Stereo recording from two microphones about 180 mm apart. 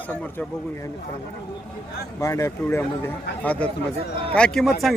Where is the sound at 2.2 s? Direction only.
15° left (ahead or behind); by 4.9 s centre (ahead or behind).